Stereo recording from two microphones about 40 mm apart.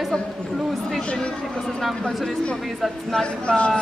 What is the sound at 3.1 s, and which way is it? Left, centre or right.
Speech, left.